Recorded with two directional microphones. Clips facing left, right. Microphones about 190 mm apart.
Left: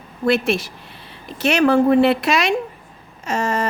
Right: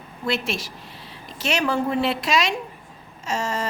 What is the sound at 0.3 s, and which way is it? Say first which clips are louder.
A woman's voice: left 8 dB; 55° left (ahead or behind).